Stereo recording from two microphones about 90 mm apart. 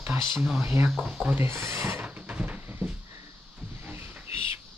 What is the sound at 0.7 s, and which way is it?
Speech, 20° right (ahead or behind).